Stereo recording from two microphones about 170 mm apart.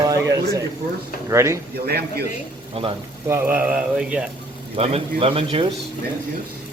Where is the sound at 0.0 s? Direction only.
20° right (ahead or behind).